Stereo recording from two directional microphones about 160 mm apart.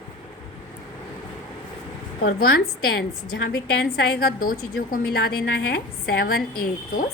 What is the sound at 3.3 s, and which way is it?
A woman's voice, 85° left.